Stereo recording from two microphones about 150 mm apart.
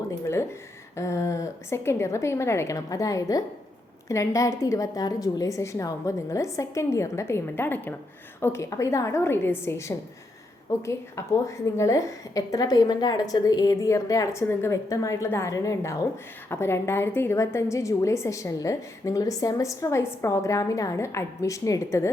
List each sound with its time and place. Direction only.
0.9 s a woman's voice: 20° left (ahead or behind)